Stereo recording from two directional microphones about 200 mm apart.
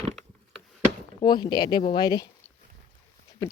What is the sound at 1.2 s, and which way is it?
Speech, 20° left (ahead or behind).